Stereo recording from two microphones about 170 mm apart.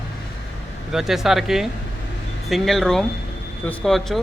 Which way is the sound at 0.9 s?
Centre (ahead or behind).